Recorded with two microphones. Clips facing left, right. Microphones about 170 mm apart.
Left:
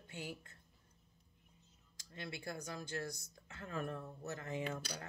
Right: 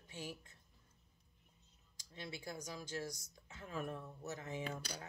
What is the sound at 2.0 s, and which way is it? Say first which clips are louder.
Speech: left 1 dB; 55° left (ahead or behind).